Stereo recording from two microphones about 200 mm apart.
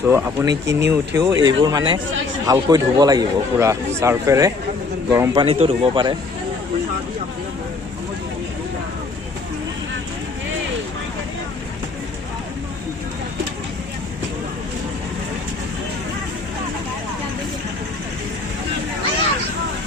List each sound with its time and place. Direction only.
0.0 s a man's voice: 10° right (ahead or behind)